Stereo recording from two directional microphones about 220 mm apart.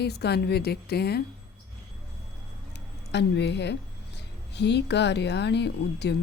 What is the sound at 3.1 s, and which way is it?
A woman's voice, 50° left (ahead or behind).